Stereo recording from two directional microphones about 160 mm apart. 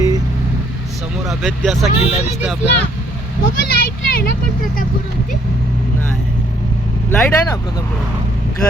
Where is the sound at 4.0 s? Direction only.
75° left (ahead or behind).